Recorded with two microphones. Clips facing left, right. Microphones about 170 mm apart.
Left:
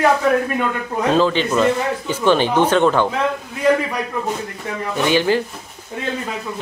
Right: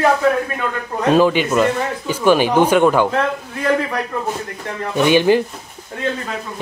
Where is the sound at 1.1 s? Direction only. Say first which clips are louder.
Right 3 dB; 15° right (ahead or behind).